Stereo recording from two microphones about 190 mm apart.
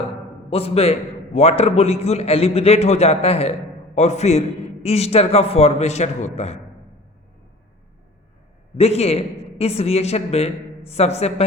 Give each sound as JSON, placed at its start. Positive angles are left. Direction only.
{"t": 0.5, "sound": "a man's voice", "side_deg": 30}
{"t": 8.8, "sound": "a man's voice", "side_deg": 35}